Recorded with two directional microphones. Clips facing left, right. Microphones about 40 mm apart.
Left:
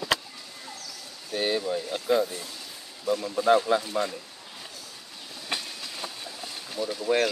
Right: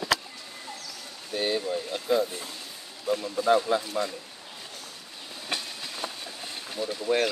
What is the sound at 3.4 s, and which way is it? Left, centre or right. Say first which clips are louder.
Speech: left 2 dB; centre.